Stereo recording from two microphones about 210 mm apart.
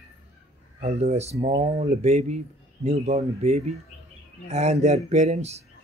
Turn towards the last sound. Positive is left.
turn(degrees=-30)  # may be behind; listen again after turning